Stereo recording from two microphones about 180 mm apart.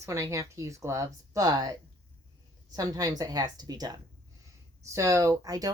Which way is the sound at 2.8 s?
20° right (ahead or behind).